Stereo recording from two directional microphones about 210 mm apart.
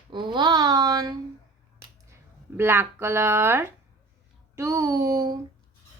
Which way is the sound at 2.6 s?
10° right (ahead or behind).